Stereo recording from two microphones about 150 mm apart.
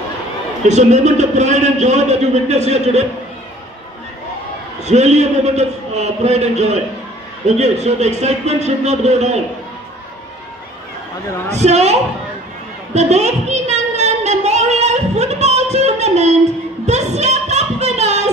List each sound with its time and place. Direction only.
0.7 s a man's voice: 50° right (ahead or behind)
4.8 s a man's voice: 50° right (ahead or behind)
11.5 s a man's voice: 50° right (ahead or behind)
12.9 s child singing: 50° right (ahead or behind)
16.8 s music: 50° right (ahead or behind)